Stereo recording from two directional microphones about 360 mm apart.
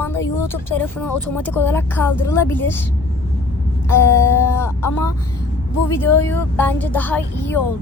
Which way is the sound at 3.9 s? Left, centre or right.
Centre.